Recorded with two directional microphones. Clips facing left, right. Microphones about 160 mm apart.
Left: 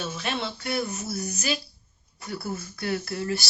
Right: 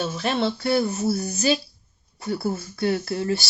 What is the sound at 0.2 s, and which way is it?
Speech, 35° right (ahead or behind).